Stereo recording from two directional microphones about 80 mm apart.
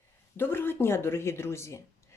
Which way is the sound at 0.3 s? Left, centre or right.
Left.